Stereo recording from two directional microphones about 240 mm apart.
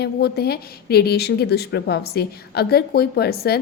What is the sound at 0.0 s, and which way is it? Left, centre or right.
A woman's voice, left.